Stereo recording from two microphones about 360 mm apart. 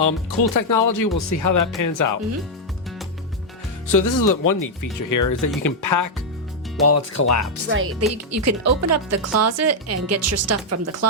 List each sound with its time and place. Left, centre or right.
0.0 s speech: left
3.9 s speech: left
6.8 s speech: left
7.7 s speech: right
8.1 s speech: right